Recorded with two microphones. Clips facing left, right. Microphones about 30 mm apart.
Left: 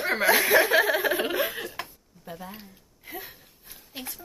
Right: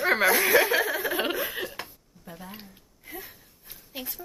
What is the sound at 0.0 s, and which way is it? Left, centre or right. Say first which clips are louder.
Chuckle: right 3 dB; centre.